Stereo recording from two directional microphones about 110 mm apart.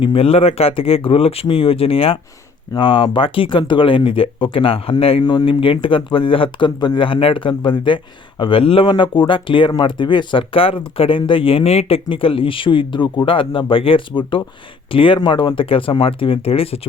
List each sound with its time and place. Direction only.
0.0 s speech: 55° left (ahead or behind)
5.2 s speech: 40° left (ahead or behind); by 16.8 s 60° left (ahead or behind)